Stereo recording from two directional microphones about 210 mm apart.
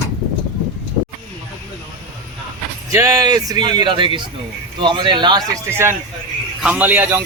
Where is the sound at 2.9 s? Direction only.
15° right (ahead or behind).